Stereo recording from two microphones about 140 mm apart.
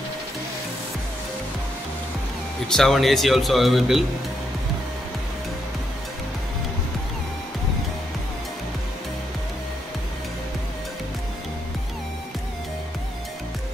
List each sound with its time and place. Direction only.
2.7 s speech: centre (ahead or behind)